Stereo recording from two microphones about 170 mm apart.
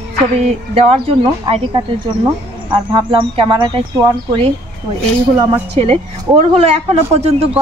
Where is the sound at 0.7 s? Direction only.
35° right (ahead or behind).